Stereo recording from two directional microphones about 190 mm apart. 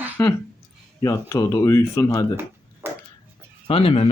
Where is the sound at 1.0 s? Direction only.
15° left (ahead or behind).